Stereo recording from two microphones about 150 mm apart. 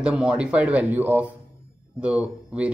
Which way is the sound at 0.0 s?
5° right (ahead or behind).